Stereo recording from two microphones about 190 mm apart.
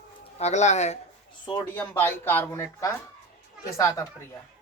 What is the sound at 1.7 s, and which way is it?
A man's voice, 10° left (ahead or behind).